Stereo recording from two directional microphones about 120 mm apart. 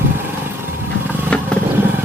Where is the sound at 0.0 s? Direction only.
20° right (ahead or behind).